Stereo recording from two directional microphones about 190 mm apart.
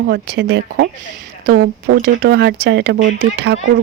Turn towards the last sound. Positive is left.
turn(degrees=-55)  # may be behind; listen again after turning